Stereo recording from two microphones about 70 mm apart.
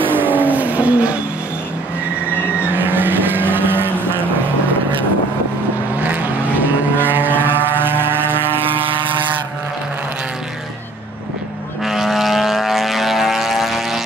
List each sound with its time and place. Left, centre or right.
0.1 s vehicle: right
2.7 s vehicle: right
6.0 s vehicle: right
11.8 s vehicle: centre